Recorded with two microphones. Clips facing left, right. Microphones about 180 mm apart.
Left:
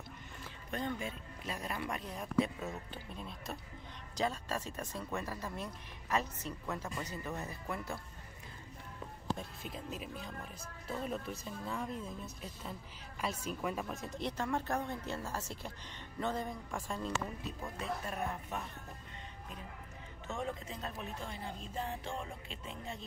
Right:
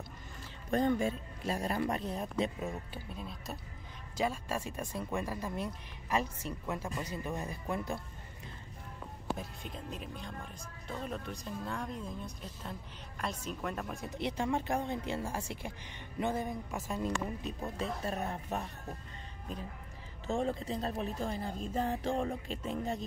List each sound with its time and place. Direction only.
0.7 s speech: 40° right (ahead or behind); by 3.0 s 15° right (ahead or behind)
3.2 s speech: centre (ahead or behind); by 8.0 s 15° right (ahead or behind)
9.4 s speech: 5° left (ahead or behind)
14.0 s speech: 10° right (ahead or behind)
17.2 s speech: 20° right (ahead or behind)
17.7 s speech: 30° right (ahead or behind)
20.2 s speech: 30° right (ahead or behind)